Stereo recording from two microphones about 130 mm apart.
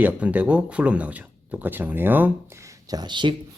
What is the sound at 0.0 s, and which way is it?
Speech, 10° right (ahead or behind).